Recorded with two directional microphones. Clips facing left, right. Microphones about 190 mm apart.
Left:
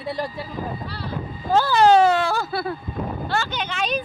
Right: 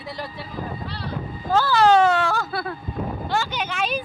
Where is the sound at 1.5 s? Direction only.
15° left (ahead or behind).